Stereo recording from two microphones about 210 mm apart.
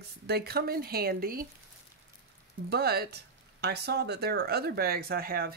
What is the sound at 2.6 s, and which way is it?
Speech, 50° right (ahead or behind).